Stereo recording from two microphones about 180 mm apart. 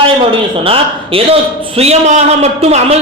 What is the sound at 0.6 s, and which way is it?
A man's voice, 30° right (ahead or behind).